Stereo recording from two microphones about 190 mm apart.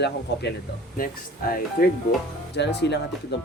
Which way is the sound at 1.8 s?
50° left (ahead or behind).